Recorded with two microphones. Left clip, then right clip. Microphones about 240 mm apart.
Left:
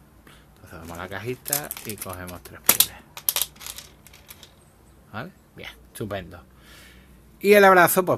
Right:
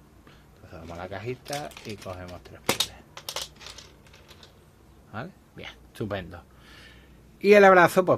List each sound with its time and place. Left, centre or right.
0.7 s speech: centre
5.1 s speech: centre